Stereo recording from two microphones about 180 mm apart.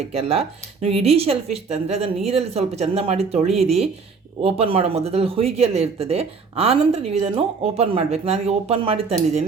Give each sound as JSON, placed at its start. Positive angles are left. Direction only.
{"t": 0.1, "sound": "speech", "side_deg": -35}